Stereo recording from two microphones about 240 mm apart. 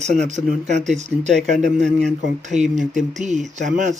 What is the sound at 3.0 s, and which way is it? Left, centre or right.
Speech, right.